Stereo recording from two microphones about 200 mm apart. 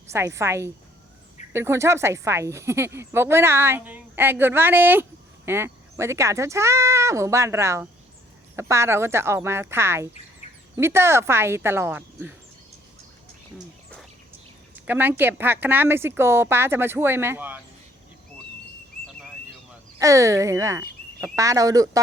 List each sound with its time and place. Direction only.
0.1 s a woman's voice: 15° right (ahead or behind)
14.8 s a woman's voice: 10° right (ahead or behind)
20.0 s a woman's voice: 15° right (ahead or behind)